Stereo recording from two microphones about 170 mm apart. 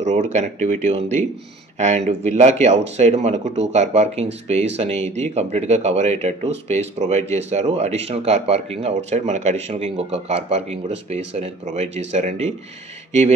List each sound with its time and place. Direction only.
0.0 s speech: 45° right (ahead or behind)